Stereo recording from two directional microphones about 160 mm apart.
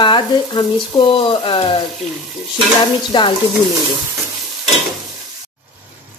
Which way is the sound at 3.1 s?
30° left (ahead or behind).